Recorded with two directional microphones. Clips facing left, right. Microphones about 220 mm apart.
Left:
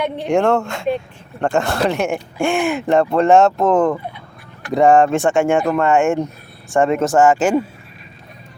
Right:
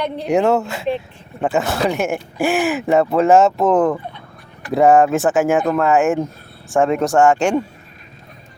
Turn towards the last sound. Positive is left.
turn(degrees=0)  # may be behind; listen again after turning